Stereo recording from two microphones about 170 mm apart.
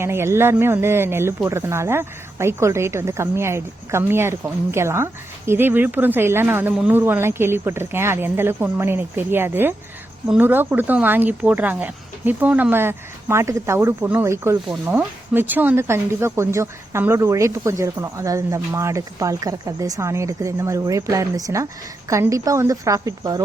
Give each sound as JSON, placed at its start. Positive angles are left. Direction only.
{"t": 0.0, "sound": "a woman's voice", "side_deg": -15}